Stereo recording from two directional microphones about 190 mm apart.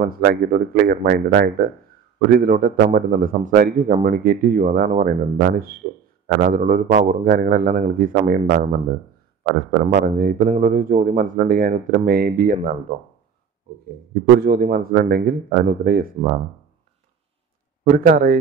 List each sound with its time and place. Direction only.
0.0 s a man's voice: 50° right (ahead or behind)
14.4 s a man's voice: 50° right (ahead or behind)
17.8 s a man's voice: 45° right (ahead or behind)